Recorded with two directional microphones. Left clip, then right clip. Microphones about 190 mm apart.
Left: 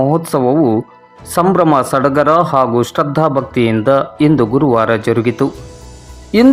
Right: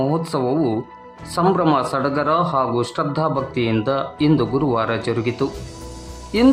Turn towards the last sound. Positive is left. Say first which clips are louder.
# left 6 dB
turn(degrees=25)  # may be behind; listen again after turning